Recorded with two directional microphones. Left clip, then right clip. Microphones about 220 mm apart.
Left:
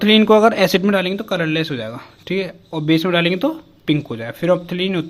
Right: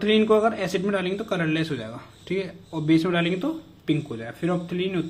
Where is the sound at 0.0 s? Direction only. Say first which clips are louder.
Left 8 dB; 50° left (ahead or behind).